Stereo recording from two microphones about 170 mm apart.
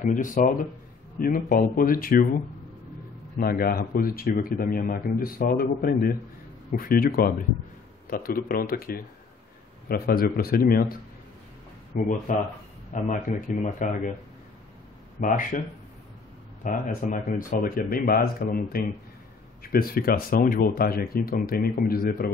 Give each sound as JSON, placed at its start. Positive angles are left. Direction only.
{"t": 0.0, "sound": "speech", "side_deg": 50}
{"t": 11.9, "sound": "speech", "side_deg": 50}
{"t": 15.1, "sound": "speech", "side_deg": 55}
{"t": 16.6, "sound": "speech", "side_deg": 50}